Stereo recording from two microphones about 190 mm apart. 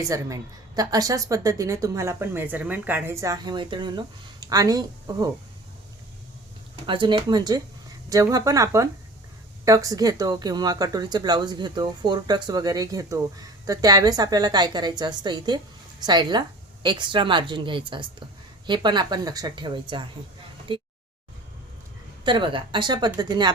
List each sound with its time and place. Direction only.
0.0 s speech: 15° right (ahead or behind)
6.8 s speech: 25° right (ahead or behind)
20.7 s a sound: 25° right (ahead or behind)
22.2 s speech: 25° right (ahead or behind)